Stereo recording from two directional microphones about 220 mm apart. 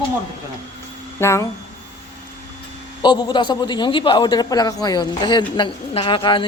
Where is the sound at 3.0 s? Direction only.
20° left (ahead or behind).